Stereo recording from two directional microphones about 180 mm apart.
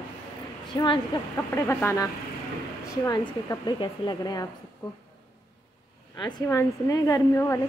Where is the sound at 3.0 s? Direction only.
20° left (ahead or behind).